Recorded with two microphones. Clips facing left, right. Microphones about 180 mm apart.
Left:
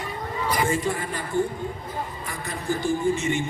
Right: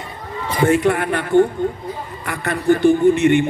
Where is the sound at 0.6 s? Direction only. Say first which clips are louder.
Right 13 dB; 65° right (ahead or behind).